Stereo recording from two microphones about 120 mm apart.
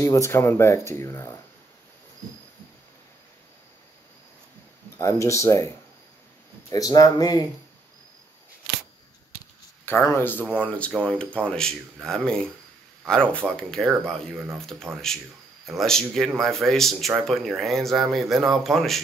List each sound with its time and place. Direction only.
0.0 s speech: 25° left (ahead or behind)
4.9 s speech: 25° left (ahead or behind)
6.7 s speech: 30° left (ahead or behind)
9.8 s speech: 20° left (ahead or behind); by 18.9 s centre (ahead or behind)